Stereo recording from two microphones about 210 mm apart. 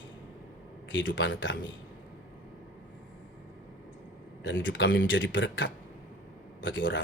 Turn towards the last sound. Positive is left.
turn(degrees=60)  # may be behind; listen again after turning